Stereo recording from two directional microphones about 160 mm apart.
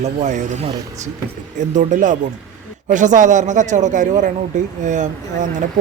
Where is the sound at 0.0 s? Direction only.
45° right (ahead or behind).